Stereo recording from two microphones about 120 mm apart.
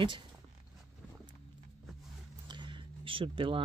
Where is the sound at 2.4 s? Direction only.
40° right (ahead or behind).